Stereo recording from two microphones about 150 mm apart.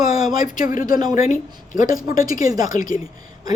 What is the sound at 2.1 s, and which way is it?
Speech, 65° left (ahead or behind).